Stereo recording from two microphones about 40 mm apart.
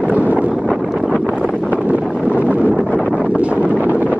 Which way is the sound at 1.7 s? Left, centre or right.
Right.